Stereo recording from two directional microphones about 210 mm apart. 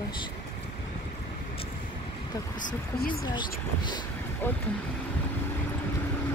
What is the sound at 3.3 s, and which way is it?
Speech, 20° left (ahead or behind).